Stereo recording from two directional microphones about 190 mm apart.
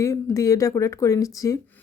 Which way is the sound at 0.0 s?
15° left (ahead or behind).